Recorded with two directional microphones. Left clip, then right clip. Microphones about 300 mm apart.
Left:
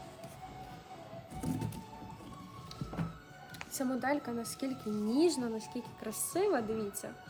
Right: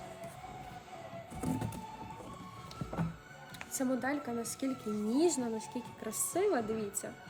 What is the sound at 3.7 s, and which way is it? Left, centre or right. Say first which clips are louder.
A woman's voice: left 1 dB; centre.